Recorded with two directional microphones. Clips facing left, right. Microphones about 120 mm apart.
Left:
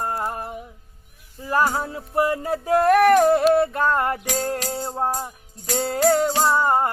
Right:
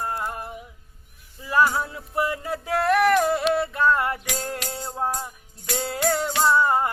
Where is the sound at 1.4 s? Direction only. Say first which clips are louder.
Even; 40° left (ahead or behind).